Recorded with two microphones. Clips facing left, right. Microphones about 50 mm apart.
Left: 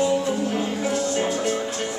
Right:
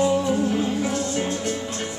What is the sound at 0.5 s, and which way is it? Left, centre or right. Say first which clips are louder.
Music: even; centre.